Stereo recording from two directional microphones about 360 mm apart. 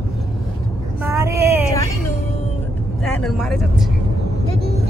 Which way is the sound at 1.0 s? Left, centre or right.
Centre.